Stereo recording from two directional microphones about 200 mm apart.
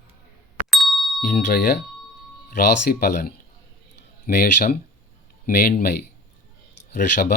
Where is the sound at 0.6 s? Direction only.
Centre (ahead or behind).